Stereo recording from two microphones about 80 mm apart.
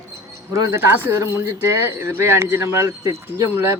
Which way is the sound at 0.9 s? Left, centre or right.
Right.